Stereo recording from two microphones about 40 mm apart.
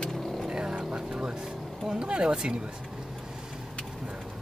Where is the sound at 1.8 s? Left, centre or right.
Right.